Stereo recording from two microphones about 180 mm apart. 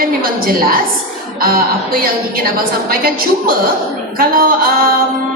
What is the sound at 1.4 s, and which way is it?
A woman's voice, 55° right (ahead or behind).